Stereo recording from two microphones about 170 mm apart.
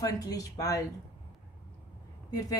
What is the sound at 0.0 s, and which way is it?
Speech, 20° left (ahead or behind).